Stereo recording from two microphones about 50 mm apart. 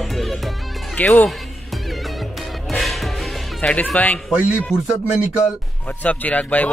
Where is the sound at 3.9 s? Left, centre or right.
Left.